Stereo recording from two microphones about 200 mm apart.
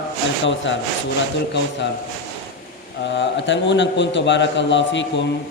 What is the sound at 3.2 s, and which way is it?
A man's voice, 65° left (ahead or behind).